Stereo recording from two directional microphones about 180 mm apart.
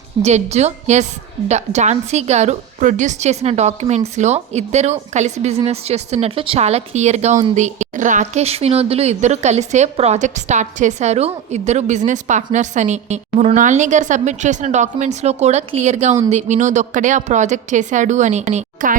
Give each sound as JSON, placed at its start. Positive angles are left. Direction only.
{"t": 0.2, "sound": "a woman's voice", "side_deg": -35}